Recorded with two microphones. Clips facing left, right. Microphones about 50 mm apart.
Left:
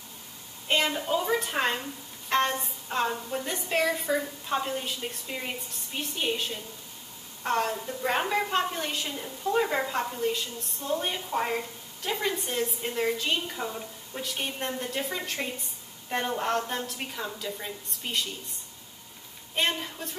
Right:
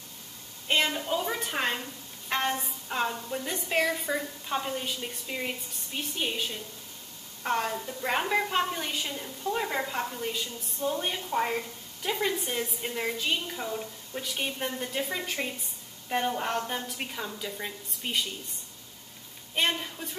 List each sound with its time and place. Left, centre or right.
0.7 s a woman's voice: centre
19.5 s a woman's voice: centre